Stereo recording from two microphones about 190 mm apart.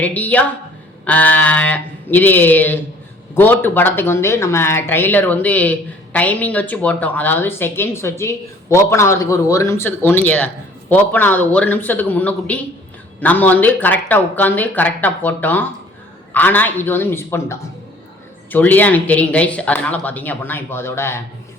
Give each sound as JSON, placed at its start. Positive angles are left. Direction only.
{"t": 0.0, "sound": "a woman's voice", "side_deg": 10}